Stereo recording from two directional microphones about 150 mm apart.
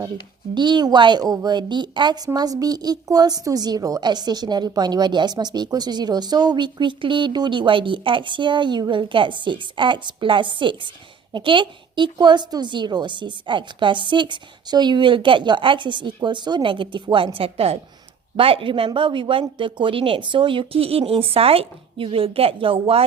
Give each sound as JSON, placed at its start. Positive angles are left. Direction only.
{"t": 0.5, "sound": "a woman's voice", "side_deg": -30}